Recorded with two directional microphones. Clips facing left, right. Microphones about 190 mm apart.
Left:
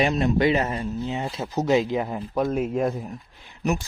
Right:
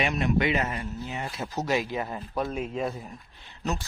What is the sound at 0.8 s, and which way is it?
Speech, 20° left (ahead or behind).